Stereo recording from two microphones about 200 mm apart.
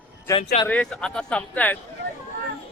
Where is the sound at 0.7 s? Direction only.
5° left (ahead or behind).